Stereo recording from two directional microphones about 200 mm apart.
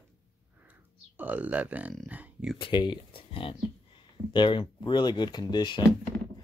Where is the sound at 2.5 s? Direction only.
25° left (ahead or behind).